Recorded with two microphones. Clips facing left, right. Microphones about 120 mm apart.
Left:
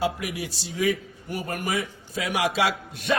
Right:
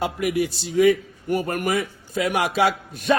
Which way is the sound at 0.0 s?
55° right (ahead or behind).